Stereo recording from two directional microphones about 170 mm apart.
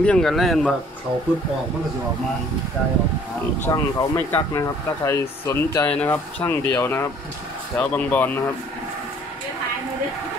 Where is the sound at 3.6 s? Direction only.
20° left (ahead or behind).